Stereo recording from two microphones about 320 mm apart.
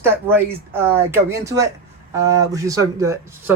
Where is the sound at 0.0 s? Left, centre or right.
Centre.